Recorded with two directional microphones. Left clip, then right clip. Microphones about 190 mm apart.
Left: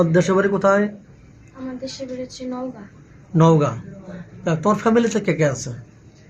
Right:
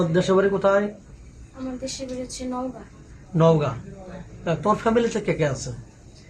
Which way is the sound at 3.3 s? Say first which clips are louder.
Left 3 dB; 50° left (ahead or behind).